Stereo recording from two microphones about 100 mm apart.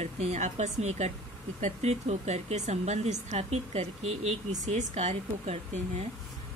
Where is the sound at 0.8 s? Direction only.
90° right.